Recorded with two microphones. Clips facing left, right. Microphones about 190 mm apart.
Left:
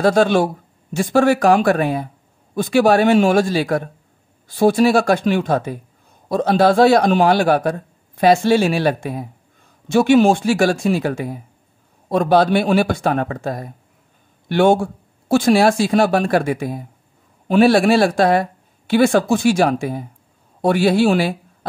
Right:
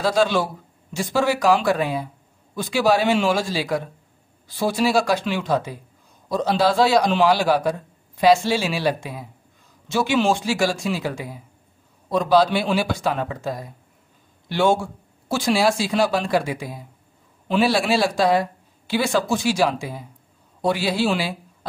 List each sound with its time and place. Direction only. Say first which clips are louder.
0.0 s a man's voice: left 5 dB; 55° left (ahead or behind)